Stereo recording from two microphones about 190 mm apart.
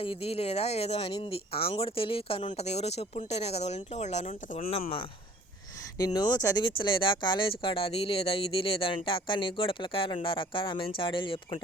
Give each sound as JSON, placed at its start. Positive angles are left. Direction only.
{"t": 0.0, "sound": "speech", "side_deg": 30}
{"t": 6.1, "sound": "speech", "side_deg": 20}